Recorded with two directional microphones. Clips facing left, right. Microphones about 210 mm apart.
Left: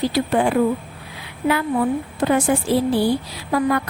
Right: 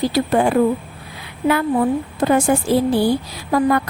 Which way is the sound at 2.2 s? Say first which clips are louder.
Right 2 dB; 40° right (ahead or behind).